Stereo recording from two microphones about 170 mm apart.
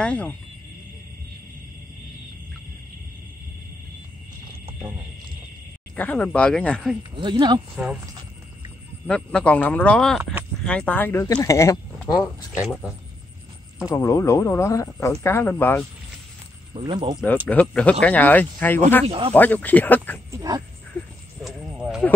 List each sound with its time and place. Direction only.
0.0 s speech: 5° left (ahead or behind)
5.9 s speech: 10° left (ahead or behind)
7.2 s speech: 25° right (ahead or behind)
7.7 s speech: 5° right (ahead or behind)
9.0 s speech: 5° left (ahead or behind)
12.0 s speech: centre (ahead or behind)
13.8 s speech: 20° left (ahead or behind)
16.7 s speech: 30° right (ahead or behind)
17.5 s speech: 10° left (ahead or behind)
19.0 s speech: 35° right (ahead or behind)
19.3 s speech: 10° left (ahead or behind)
20.2 s speech: 20° right (ahead or behind)
21.4 s a sound: centre (ahead or behind)